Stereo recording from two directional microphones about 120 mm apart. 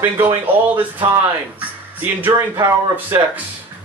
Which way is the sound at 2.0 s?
20° right (ahead or behind).